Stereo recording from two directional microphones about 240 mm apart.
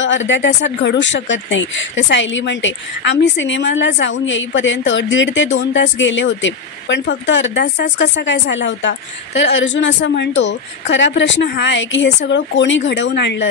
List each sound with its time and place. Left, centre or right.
0.0 s speech: left